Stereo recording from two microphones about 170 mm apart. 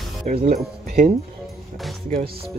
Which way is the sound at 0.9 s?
40° right (ahead or behind).